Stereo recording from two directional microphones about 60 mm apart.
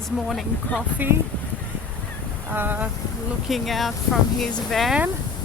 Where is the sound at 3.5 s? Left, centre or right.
Centre.